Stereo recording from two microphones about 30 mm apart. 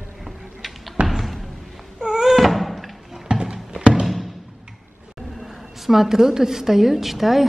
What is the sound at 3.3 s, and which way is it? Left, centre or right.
Horse, right.